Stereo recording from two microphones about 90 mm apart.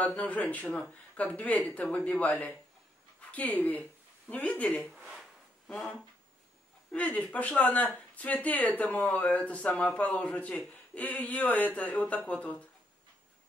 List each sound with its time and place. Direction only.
0.0 s speech: 15° left (ahead or behind)
4.9 s a sound: 10° right (ahead or behind)
6.9 s speech: 15° left (ahead or behind)